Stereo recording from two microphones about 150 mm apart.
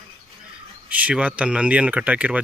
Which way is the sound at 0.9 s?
10° right (ahead or behind).